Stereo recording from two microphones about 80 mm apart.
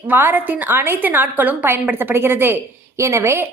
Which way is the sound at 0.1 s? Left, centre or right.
Right.